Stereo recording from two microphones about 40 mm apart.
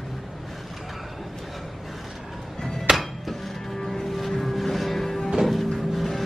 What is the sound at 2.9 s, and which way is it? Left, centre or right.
Music, centre.